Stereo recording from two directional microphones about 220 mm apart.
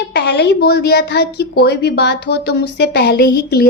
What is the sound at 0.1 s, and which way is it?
A woman's voice, 50° left (ahead or behind).